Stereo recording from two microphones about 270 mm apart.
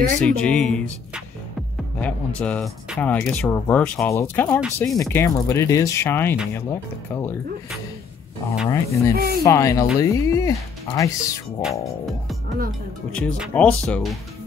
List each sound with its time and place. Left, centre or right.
0.2 s speech: centre
8.6 s speech: centre
9.1 s speech: right
9.4 s speech: centre
13.1 s speech: centre